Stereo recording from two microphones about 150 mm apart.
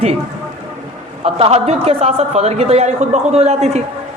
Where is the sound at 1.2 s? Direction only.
40° right (ahead or behind).